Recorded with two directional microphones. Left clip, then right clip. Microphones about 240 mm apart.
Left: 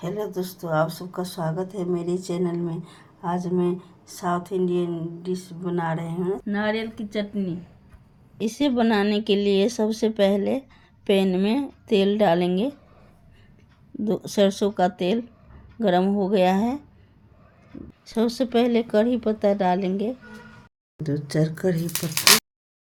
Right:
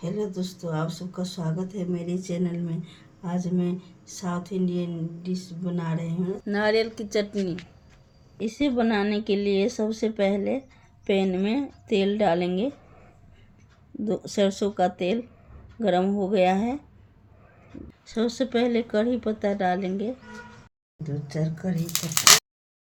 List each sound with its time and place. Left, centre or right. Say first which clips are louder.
0.3 s speech: left 8 dB; centre
6.4 s speech: right 3 dB; right
8.4 s speech: left 2 dB; centre
14.0 s speech: left 3 dB; centre
18.0 s speech: left 2 dB; centre
21.0 s speech: left 7 dB; left